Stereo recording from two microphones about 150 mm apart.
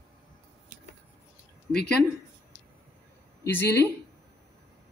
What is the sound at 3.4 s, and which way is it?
Speech, 15° left (ahead or behind).